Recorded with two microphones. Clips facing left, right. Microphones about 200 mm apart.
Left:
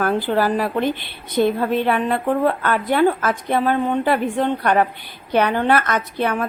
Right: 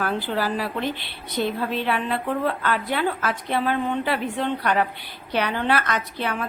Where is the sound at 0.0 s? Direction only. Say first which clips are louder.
Left 6 dB; 50° left (ahead or behind).